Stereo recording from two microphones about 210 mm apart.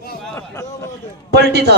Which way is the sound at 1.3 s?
50° right (ahead or behind).